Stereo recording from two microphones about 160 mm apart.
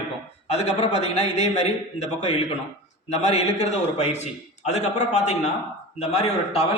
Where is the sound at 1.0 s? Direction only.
45° left (ahead or behind).